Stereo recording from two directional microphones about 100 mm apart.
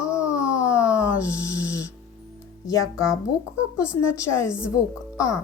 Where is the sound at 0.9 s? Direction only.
25° left (ahead or behind).